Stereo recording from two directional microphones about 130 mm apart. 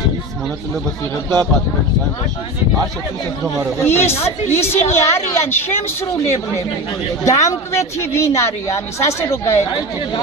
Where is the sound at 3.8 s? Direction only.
20° left (ahead or behind).